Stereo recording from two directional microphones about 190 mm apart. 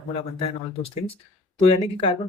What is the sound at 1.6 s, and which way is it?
Speech, 30° left (ahead or behind).